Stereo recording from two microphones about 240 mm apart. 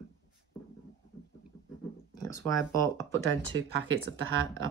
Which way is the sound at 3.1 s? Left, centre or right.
Right.